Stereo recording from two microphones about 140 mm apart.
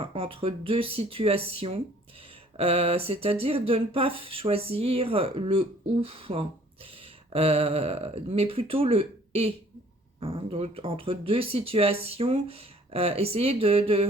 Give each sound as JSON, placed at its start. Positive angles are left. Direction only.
{"t": 0.0, "sound": "speech", "side_deg": -40}